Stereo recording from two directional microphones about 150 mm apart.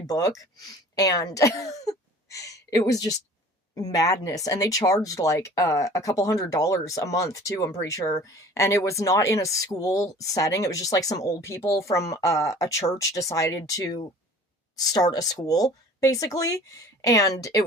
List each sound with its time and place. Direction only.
0.1 s speech: 25° left (ahead or behind)